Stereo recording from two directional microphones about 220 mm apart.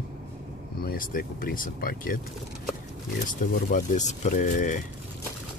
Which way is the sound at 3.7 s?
35° left (ahead or behind).